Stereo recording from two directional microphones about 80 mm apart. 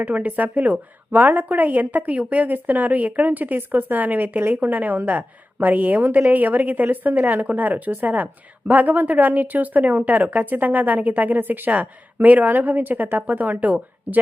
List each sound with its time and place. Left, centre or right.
0.0 s a woman's voice: right